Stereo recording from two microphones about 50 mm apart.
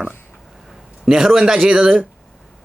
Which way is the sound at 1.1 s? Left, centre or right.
Centre.